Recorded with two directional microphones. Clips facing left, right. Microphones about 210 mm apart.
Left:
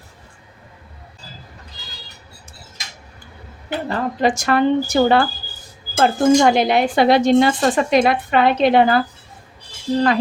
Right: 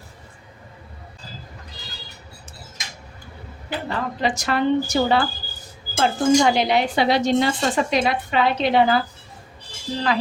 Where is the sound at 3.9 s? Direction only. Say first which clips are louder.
Left 5 dB; 45° left (ahead or behind).